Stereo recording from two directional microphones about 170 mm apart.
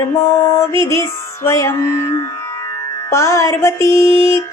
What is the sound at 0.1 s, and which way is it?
Mantra, 15° left (ahead or behind).